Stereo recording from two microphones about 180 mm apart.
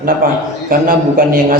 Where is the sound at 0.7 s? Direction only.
50° right (ahead or behind).